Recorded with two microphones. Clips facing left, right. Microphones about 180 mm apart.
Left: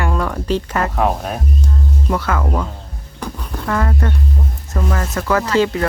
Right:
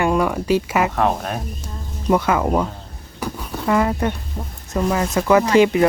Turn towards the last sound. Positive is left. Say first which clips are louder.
# right 3 dB
turn(degrees=-15)  # may be behind; listen again after turning